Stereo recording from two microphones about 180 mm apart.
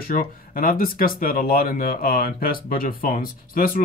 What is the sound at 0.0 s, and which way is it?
Speech, 50° left (ahead or behind).